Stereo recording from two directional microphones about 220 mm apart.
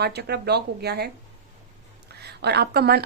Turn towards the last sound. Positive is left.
turn(degrees=-45)  # may be behind; listen again after turning